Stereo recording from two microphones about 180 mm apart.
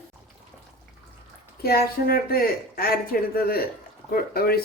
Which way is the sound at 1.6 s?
55° left (ahead or behind).